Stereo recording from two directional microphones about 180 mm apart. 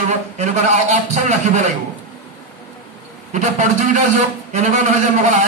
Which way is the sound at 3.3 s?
40° right (ahead or behind).